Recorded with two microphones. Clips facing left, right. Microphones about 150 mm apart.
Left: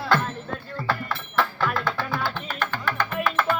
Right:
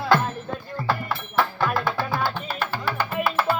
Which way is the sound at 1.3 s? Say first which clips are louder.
Right 2 dB; 10° right (ahead or behind).